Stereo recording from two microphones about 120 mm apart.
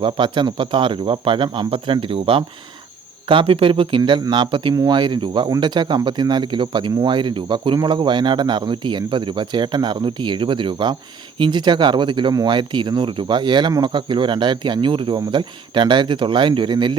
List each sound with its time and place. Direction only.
0.0 s speech: 40° right (ahead or behind)